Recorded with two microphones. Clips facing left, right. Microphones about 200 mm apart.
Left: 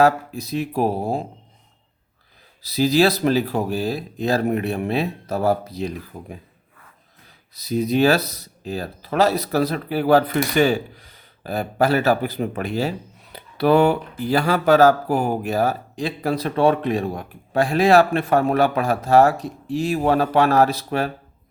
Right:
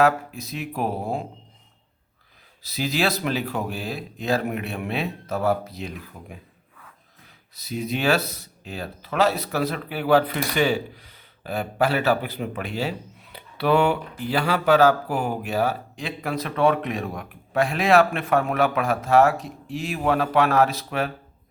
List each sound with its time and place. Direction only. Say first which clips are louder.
0.0 s speech: left 3 dB; 35° left (ahead or behind)
2.6 s speech: left 8 dB; 35° left (ahead or behind)
7.5 s speech: left 8 dB; 35° left (ahead or behind)